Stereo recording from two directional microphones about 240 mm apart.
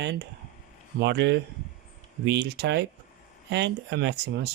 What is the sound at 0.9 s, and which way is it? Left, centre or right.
Speech, right.